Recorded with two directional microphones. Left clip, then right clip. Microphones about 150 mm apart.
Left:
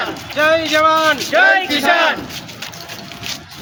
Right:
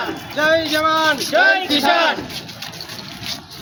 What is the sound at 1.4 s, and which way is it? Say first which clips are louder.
Music: left 2 dB; 10° right (ahead or behind).